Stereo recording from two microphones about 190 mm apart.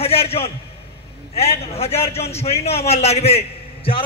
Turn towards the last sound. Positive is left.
turn(degrees=30)  # may be behind; listen again after turning